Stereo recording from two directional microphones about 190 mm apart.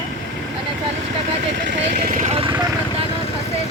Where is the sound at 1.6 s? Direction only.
60° right (ahead or behind); by 2.5 s 30° right (ahead or behind).